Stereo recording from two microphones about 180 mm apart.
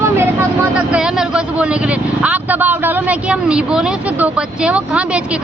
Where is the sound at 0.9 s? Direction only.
5° right (ahead or behind).